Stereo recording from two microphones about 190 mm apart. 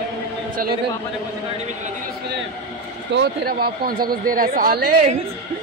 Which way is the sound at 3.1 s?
60° right (ahead or behind).